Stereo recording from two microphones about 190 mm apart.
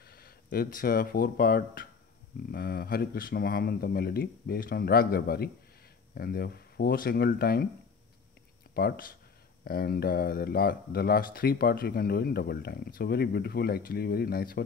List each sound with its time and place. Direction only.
0.0 s speech: 55° left (ahead or behind)
8.7 s speech: 55° left (ahead or behind)